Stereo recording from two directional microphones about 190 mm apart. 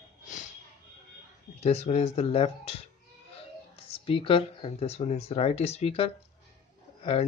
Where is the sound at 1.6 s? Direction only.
35° left (ahead or behind).